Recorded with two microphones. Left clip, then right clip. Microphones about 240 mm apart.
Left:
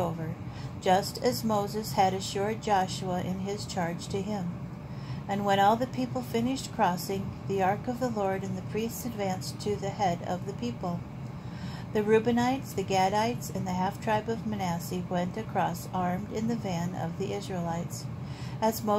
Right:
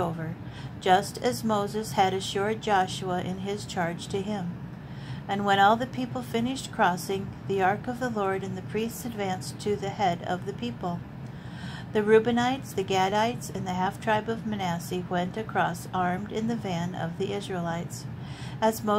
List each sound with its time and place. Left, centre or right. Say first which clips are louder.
0.8 s a woman's voice: right 2 dB; right